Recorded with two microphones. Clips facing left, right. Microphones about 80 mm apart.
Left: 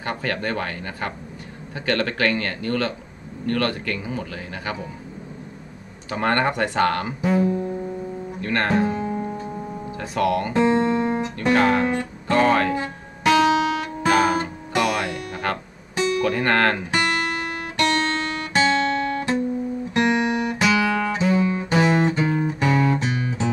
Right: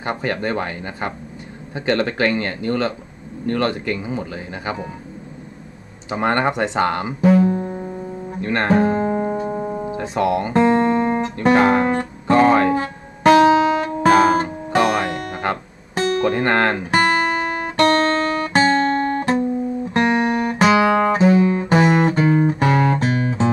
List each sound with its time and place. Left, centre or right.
0.0 s speech: right
6.0 s speech: centre
7.4 s music: right
8.4 s speech: right
8.8 s music: right
9.8 s speech: right
10.5 s music: right
11.3 s music: right
12.7 s music: right
16.2 s speech: right
17.6 s guitar: right